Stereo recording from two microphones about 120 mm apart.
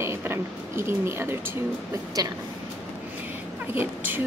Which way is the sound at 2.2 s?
35° right (ahead or behind).